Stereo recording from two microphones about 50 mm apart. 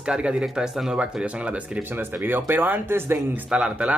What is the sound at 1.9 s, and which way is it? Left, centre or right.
Speech, right.